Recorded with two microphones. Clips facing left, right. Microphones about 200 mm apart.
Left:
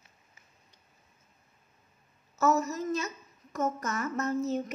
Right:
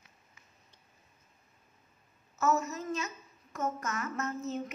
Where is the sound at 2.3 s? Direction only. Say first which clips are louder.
Left 3 dB; 35° left (ahead or behind).